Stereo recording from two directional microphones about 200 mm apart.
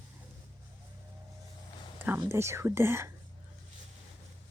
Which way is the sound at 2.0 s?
10° right (ahead or behind).